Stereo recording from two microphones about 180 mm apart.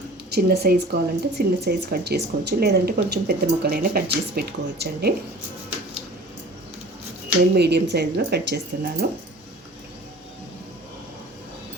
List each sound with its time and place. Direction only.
0.3 s speech: 60° right (ahead or behind)
7.5 s speech: 65° right (ahead or behind)